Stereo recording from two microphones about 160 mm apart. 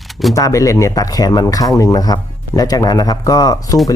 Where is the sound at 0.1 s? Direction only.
Centre (ahead or behind).